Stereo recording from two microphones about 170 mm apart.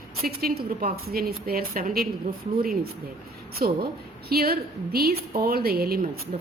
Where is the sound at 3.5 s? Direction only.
60° right (ahead or behind).